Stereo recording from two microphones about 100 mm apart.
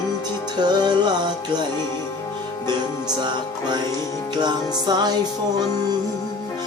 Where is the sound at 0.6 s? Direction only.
45° right (ahead or behind).